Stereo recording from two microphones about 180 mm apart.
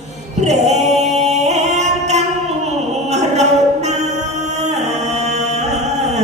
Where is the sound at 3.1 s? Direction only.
40° right (ahead or behind).